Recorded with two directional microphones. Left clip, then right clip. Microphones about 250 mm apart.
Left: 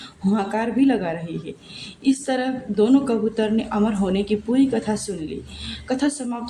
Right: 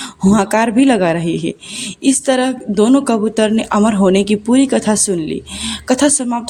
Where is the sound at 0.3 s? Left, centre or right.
Right.